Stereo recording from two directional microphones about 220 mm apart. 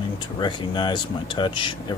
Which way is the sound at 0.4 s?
20° left (ahead or behind).